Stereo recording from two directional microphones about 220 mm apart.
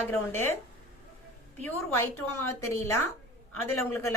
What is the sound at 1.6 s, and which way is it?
Speech, 10° left (ahead or behind).